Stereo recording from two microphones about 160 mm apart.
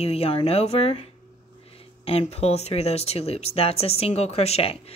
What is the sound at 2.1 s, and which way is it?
Speech, 40° left (ahead or behind).